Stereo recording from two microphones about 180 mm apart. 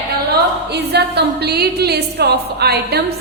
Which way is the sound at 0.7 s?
65° right (ahead or behind).